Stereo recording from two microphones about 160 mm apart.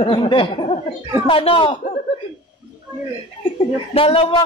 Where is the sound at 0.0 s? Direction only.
30° left (ahead or behind).